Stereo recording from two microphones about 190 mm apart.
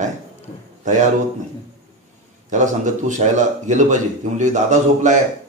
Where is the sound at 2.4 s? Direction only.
40° right (ahead or behind).